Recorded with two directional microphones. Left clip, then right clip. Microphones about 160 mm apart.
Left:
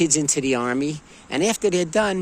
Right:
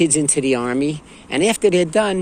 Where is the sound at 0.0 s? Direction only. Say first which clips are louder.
Right 3 dB; 45° left (ahead or behind).